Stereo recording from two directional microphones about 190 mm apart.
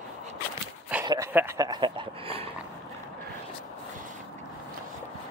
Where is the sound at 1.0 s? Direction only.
15° right (ahead or behind).